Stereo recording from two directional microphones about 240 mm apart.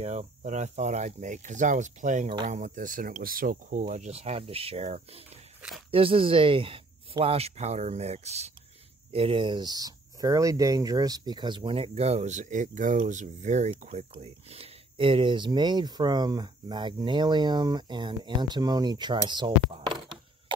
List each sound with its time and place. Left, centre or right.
0.0 s speech: right
2.6 s speech: right